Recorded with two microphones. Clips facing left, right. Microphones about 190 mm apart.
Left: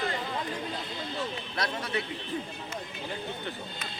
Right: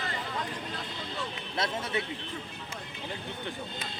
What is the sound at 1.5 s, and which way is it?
Speech, 25° right (ahead or behind).